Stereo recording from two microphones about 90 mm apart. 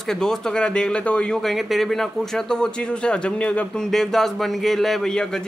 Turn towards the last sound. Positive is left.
turn(degrees=5)  # may be behind; listen again after turning